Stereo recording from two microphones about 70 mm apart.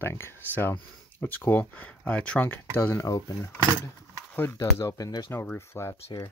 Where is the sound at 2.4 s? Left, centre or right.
Left.